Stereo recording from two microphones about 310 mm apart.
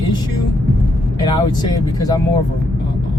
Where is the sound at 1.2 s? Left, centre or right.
Centre.